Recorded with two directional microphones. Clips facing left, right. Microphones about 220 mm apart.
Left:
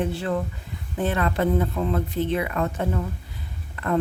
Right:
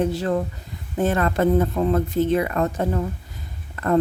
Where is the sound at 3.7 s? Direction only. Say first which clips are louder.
Right 4 dB; 40° right (ahead or behind).